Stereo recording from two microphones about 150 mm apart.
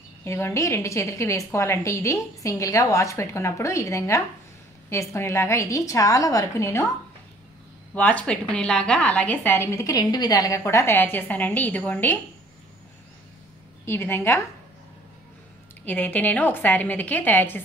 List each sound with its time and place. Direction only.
0.2 s a woman's voice: 15° left (ahead or behind)
7.9 s a woman's voice: 10° left (ahead or behind)
13.8 s a woman's voice: 15° left (ahead or behind)
15.8 s a woman's voice: 10° left (ahead or behind)